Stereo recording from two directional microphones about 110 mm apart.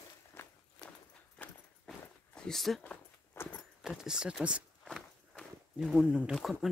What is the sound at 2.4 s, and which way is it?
Speech, 5° left (ahead or behind).